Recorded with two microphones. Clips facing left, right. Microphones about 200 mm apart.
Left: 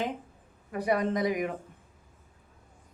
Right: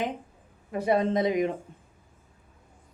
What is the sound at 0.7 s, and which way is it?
Speech, 25° right (ahead or behind).